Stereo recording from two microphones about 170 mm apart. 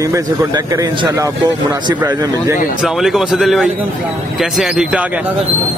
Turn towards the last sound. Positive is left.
turn(degrees=-5)  # may be behind; listen again after turning